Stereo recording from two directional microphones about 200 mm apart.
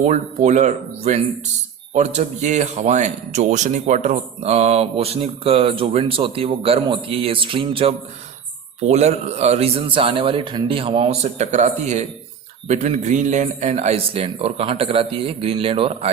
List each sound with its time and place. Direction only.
0.0 s a man's voice: 35° right (ahead or behind)